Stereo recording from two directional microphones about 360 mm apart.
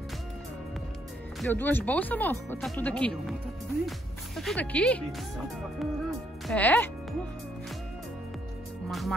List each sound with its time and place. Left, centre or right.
1.4 s speech: centre
4.4 s speech: centre
8.8 s speech: centre